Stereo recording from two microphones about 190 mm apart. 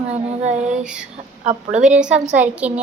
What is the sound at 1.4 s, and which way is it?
Speech, 40° right (ahead or behind).